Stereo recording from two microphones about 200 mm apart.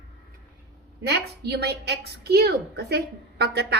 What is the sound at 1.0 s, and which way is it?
A woman's voice, 55° right (ahead or behind).